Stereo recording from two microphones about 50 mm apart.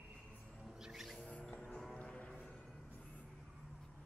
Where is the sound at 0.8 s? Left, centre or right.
Centre.